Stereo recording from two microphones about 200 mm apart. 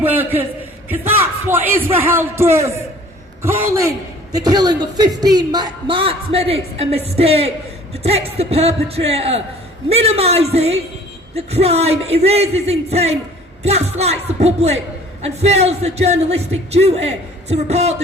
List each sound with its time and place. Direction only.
0.0 s speech: 10° right (ahead or behind); by 17.9 s 30° right (ahead or behind)